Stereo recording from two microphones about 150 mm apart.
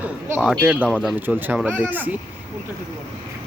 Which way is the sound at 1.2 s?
10° right (ahead or behind).